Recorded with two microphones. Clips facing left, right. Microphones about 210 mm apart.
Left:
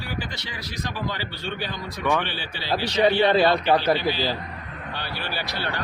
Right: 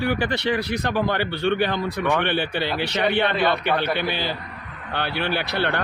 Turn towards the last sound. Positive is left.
turn(degrees=-60)  # may be behind; listen again after turning